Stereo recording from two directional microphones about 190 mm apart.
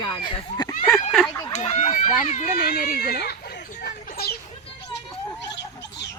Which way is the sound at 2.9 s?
55° left (ahead or behind).